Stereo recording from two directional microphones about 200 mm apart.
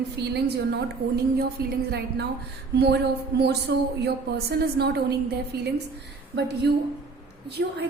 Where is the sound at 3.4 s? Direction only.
55° right (ahead or behind).